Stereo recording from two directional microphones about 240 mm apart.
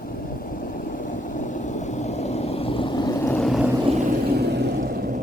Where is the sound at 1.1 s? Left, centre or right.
Left; by 3.7 s centre.